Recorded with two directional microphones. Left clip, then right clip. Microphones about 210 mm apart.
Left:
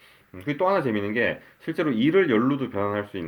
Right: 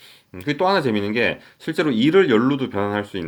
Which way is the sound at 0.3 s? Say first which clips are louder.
Right 4 dB; 45° right (ahead or behind).